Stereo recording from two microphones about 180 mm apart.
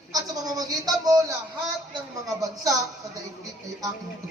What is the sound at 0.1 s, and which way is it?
A man's voice, 20° right (ahead or behind).